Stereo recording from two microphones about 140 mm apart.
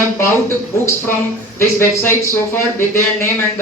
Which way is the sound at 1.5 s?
15° left (ahead or behind).